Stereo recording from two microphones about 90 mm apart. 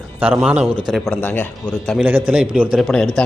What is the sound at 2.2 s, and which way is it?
Speech, 10° right (ahead or behind).